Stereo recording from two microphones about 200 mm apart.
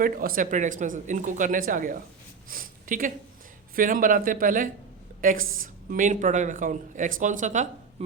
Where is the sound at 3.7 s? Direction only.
45° right (ahead or behind).